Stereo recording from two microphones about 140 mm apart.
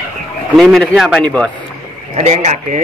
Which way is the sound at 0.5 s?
5° left (ahead or behind).